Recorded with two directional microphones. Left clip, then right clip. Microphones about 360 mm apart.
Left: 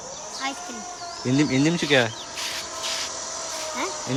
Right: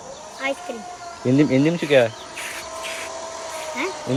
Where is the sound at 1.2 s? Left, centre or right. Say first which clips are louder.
Right 4 dB; centre.